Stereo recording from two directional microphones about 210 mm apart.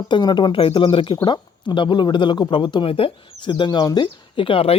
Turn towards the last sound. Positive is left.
turn(degrees=25)  # may be behind; listen again after turning